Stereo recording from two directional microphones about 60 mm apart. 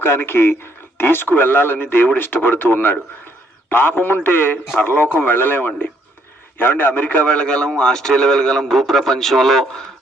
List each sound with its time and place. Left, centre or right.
0.0 s a man's voice: left; by 9.8 s centre